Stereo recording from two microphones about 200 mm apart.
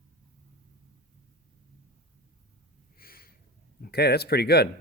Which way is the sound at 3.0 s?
45° left (ahead or behind).